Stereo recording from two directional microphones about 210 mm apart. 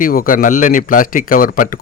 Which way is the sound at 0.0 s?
40° left (ahead or behind).